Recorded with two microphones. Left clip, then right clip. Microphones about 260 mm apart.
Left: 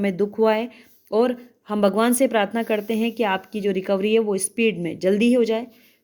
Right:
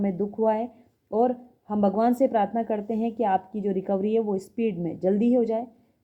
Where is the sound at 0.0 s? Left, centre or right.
Left.